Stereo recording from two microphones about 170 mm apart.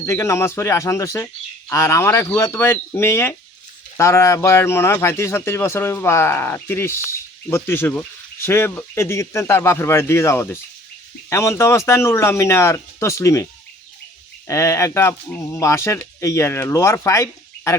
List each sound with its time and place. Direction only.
0.0 s speech: 15° left (ahead or behind)